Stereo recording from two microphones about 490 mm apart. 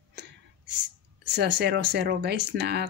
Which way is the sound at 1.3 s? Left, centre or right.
Right.